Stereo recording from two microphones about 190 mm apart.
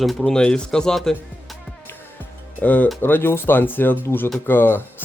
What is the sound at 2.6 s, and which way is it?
Speech, 10° left (ahead or behind).